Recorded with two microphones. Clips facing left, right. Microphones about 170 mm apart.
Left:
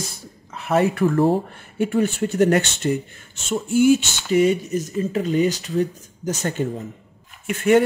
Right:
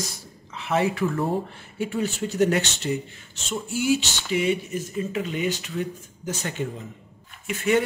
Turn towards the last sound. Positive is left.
turn(degrees=50)  # may be behind; listen again after turning